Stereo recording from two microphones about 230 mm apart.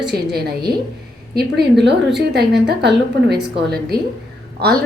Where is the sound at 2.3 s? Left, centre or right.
Right.